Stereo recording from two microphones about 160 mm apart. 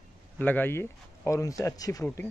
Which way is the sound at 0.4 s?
10° left (ahead or behind).